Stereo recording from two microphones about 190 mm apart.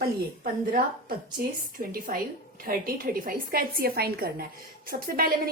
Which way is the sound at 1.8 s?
45° right (ahead or behind).